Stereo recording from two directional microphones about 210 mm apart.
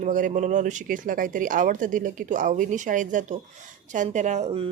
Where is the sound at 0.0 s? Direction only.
40° right (ahead or behind).